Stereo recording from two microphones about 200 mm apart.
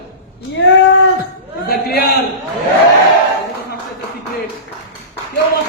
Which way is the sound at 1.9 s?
50° left (ahead or behind).